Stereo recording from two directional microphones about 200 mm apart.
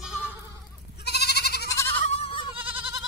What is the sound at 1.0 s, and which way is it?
Goat, 55° left (ahead or behind).